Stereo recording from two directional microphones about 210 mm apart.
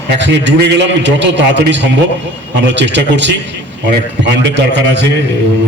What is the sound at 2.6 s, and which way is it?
A man's voice, 55° right (ahead or behind).